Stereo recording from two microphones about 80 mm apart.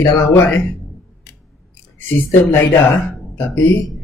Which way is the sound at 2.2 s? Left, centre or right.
Left.